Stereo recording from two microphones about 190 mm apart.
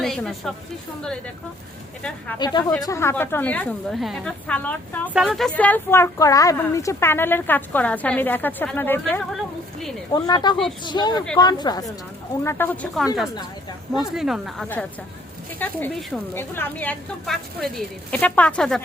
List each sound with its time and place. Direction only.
0.0 s a woman's voice: centre (ahead or behind)
2.4 s a woman's voice: 20° left (ahead or behind)
10.1 s speech: 20° left (ahead or behind)
12.4 s a woman's voice: 10° left (ahead or behind)